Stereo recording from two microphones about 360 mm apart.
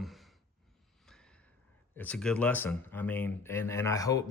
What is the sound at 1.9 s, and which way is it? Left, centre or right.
Speech, centre.